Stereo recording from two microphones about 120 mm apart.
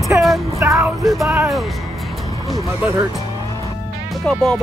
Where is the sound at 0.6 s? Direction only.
25° right (ahead or behind).